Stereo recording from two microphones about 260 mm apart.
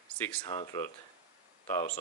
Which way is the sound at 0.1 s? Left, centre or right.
Centre.